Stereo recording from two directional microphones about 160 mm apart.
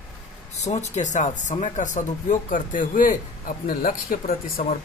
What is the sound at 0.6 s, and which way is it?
Speech, 45° left (ahead or behind).